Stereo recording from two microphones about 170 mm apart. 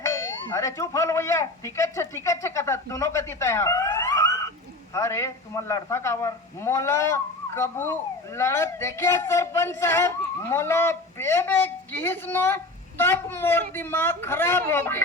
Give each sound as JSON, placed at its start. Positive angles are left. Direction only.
{"t": 0.0, "sound": "a man's voice", "side_deg": 15}